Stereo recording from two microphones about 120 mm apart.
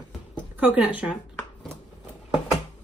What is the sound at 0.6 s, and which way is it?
Speech, 15° right (ahead or behind).